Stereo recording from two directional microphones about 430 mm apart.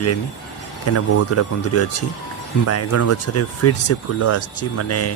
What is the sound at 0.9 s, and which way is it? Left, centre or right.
Speech, left.